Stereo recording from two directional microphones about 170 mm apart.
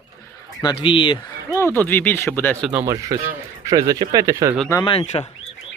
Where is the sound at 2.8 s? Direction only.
20° right (ahead or behind).